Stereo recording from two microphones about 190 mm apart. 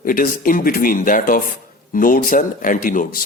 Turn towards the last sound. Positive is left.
turn(degrees=45)  # may be behind; listen again after turning